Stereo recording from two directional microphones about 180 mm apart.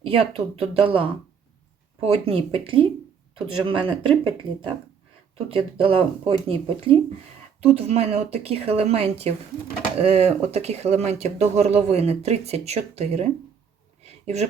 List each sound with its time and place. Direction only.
0.0 s speech: 30° right (ahead or behind)
5.5 s speech: 30° right (ahead or behind)
14.0 s a sound: 35° right (ahead or behind)